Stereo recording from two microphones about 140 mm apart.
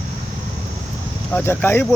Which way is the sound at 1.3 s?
15° left (ahead or behind).